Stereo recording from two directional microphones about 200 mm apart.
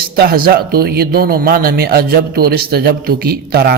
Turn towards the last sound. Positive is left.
turn(degrees=-50)  # may be behind; listen again after turning